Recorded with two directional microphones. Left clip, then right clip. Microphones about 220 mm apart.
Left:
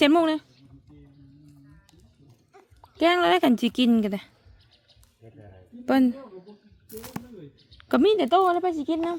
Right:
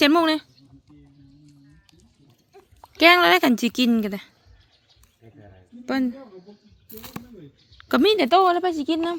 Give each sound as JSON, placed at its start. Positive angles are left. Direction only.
{"t": 0.0, "sound": "speech", "side_deg": 0}
{"t": 2.8, "sound": "speech", "side_deg": -10}
{"t": 5.8, "sound": "a man's voice", "side_deg": 25}
{"t": 7.8, "sound": "a sound", "side_deg": 5}
{"t": 8.0, "sound": "speech", "side_deg": -10}